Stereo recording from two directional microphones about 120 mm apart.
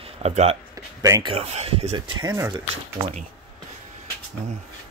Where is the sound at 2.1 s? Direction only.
30° right (ahead or behind).